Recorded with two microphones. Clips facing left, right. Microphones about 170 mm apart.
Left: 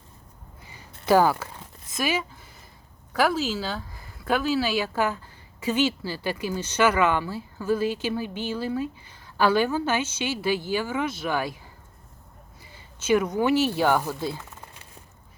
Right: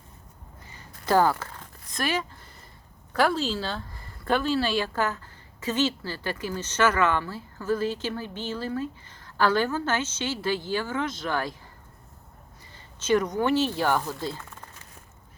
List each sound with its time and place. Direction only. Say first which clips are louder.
0.6 s a sound: left 2 dB; 10° left (ahead or behind)
3.1 s speech: left 1 dB; 5° left (ahead or behind)
12.7 s speech: left 1 dB; 10° left (ahead or behind)